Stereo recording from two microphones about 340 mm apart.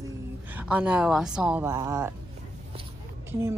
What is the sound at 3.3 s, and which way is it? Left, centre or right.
Speech, centre.